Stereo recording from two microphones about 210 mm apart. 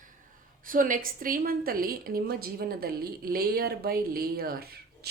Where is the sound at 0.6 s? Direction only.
40° right (ahead or behind).